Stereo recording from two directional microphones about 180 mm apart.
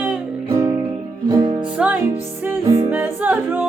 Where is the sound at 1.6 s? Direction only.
10° right (ahead or behind).